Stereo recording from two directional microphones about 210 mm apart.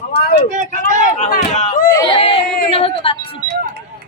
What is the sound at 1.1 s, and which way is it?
Speech, 35° left (ahead or behind).